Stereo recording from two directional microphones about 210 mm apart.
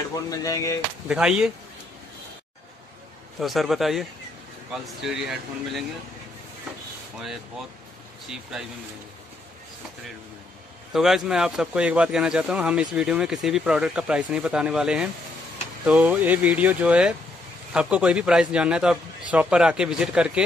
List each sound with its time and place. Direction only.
0.1 s a sound: 15° left (ahead or behind)
1.0 s speech: 5° right (ahead or behind)
3.3 s speech: centre (ahead or behind)
8.3 s speech: 5° right (ahead or behind)
10.9 s speech: centre (ahead or behind)